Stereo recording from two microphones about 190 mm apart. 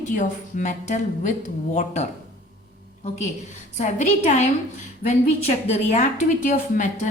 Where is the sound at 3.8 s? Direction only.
40° left (ahead or behind).